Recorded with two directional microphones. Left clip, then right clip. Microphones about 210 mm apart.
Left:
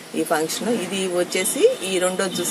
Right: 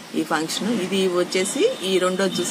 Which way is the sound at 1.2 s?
5° left (ahead or behind).